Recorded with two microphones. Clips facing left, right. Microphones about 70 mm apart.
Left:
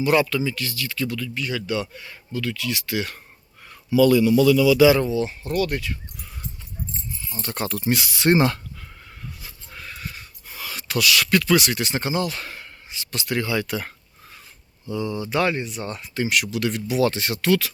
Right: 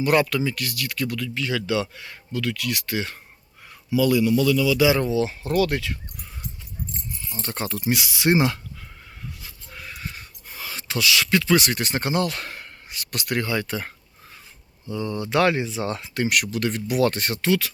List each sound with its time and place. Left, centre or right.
0.0 s speech: right
2.9 s speech: right
3.8 s a man's voice: centre
5.0 s speech: right
7.4 s speech: right
7.9 s speech: centre
9.7 s a sound: centre
10.0 s a sound: right
11.5 s speech: right
14.9 s speech: right
15.3 s speech: right
16.2 s speech: right